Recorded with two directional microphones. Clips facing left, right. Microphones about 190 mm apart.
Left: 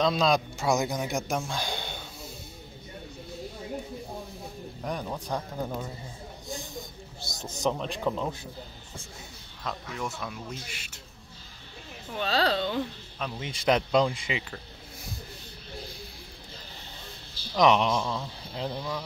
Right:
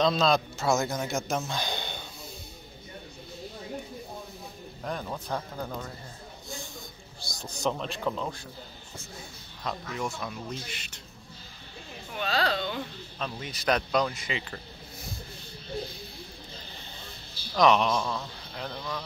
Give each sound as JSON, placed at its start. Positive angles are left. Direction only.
{"t": 0.0, "sound": "a man's voice", "side_deg": 10}
{"t": 1.5, "sound": "a sound", "side_deg": 5}
{"t": 4.8, "sound": "a man's voice", "side_deg": 10}
{"t": 6.5, "sound": "a sound", "side_deg": 20}
{"t": 7.7, "sound": "a man's voice", "side_deg": 10}
{"t": 9.6, "sound": "speech", "side_deg": 0}
{"t": 12.2, "sound": "speech", "side_deg": 35}
{"t": 13.4, "sound": "speech", "side_deg": 20}
{"t": 17.6, "sound": "speech", "side_deg": 20}
{"t": 18.7, "sound": "a man's voice", "side_deg": 10}